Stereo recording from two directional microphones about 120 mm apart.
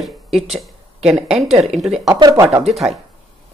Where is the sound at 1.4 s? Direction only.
60° right (ahead or behind).